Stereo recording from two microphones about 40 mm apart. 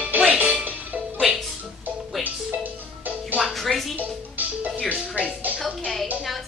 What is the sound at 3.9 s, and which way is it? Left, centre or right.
Music, right.